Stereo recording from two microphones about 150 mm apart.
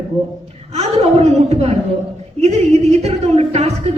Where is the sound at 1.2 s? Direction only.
45° right (ahead or behind).